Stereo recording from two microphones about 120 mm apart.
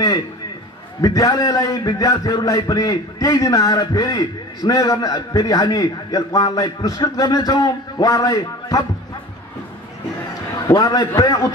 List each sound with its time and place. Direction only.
1.0 s a man's voice: 30° left (ahead or behind)
10.7 s a man's voice: 30° left (ahead or behind)